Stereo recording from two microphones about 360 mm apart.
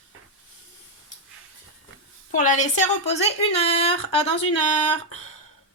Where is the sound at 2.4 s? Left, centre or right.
Left.